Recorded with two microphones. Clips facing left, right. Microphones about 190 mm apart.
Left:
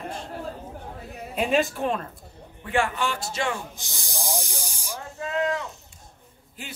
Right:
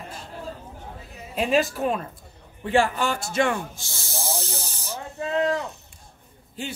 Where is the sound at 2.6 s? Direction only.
30° right (ahead or behind); by 3.6 s 55° right (ahead or behind).